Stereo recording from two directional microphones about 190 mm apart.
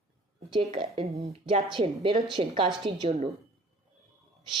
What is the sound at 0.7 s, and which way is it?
A woman's voice, 25° right (ahead or behind).